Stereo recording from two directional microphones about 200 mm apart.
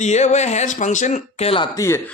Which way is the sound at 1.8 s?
15° left (ahead or behind).